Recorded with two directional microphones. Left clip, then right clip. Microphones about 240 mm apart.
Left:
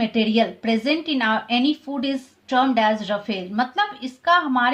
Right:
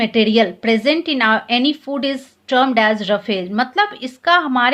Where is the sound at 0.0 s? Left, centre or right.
Right.